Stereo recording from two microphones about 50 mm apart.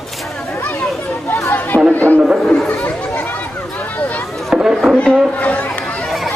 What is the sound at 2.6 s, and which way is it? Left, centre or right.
Chatter, left.